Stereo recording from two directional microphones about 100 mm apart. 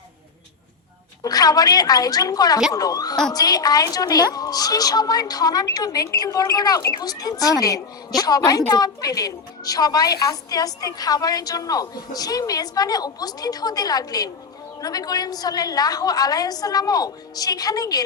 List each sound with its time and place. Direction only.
1.2 s a woman's voice: 40° left (ahead or behind)